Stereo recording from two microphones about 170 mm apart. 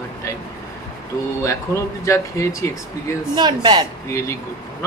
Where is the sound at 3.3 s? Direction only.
25° right (ahead or behind).